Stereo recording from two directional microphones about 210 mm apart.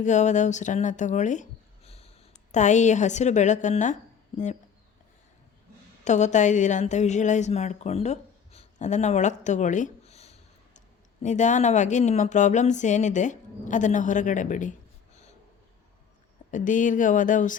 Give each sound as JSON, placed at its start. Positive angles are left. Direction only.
{"t": 0.0, "sound": "speech", "side_deg": 35}
{"t": 6.1, "sound": "a woman's voice", "side_deg": 35}
{"t": 16.5, "sound": "speech", "side_deg": 35}